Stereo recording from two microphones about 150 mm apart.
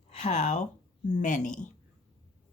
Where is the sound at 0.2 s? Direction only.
50° left (ahead or behind).